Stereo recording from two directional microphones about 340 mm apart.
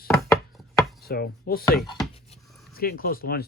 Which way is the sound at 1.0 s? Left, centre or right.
Left.